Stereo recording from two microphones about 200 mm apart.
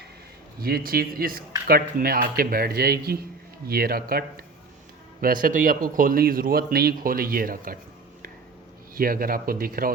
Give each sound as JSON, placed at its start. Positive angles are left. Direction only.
{"t": 0.6, "sound": "speech", "side_deg": -45}
{"t": 9.0, "sound": "speech", "side_deg": -45}